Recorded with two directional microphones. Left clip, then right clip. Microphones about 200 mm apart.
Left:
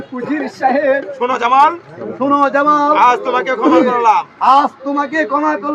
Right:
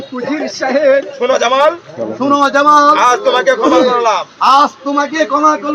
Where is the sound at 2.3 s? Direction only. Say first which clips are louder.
Right 3 dB; 15° left (ahead or behind).